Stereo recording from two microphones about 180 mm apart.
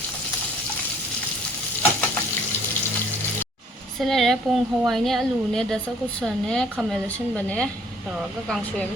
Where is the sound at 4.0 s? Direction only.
Centre (ahead or behind).